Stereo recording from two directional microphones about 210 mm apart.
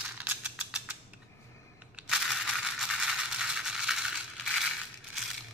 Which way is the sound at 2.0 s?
Centre (ahead or behind).